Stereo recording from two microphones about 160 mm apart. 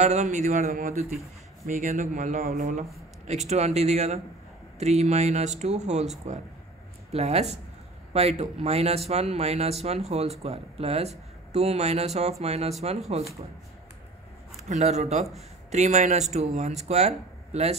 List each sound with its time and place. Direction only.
0.0 s speech: 45° right (ahead or behind)
14.7 s speech: 45° right (ahead or behind)